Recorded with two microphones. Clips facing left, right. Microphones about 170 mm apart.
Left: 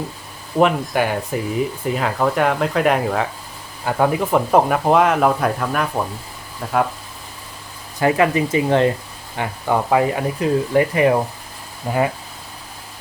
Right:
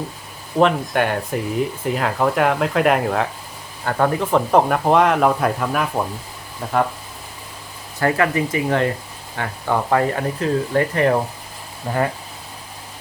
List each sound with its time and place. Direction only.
0.6 s speech: 5° left (ahead or behind)
7.9 s speech: 15° left (ahead or behind)
9.3 s speech: 15° left (ahead or behind)